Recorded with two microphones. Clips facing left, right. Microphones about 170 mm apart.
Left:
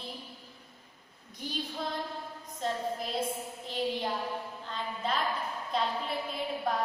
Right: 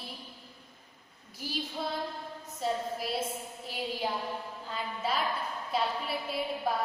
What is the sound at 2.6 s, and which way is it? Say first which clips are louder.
Speech: even; 5° right (ahead or behind).